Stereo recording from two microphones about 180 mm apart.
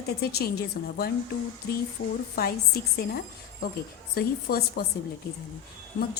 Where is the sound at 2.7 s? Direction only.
55° left (ahead or behind).